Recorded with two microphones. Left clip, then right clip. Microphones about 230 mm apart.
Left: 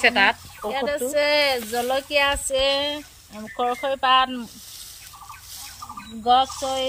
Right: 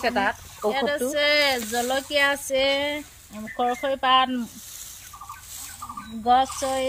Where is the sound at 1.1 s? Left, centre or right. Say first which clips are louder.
Left 2 dB; centre.